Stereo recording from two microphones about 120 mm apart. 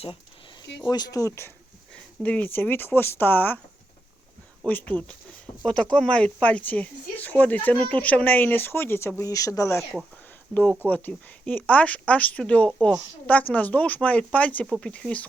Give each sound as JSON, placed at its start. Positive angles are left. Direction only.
{"t": 0.8, "sound": "speech", "side_deg": 35}
{"t": 1.9, "sound": "speech", "side_deg": 10}
{"t": 4.6, "sound": "speech", "side_deg": 10}
{"t": 10.5, "sound": "speech", "side_deg": 15}